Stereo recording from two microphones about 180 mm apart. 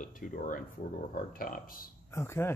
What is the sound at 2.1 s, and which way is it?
Speech, 15° left (ahead or behind).